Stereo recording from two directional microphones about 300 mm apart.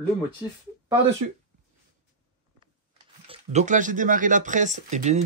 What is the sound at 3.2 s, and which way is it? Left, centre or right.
Speech, centre.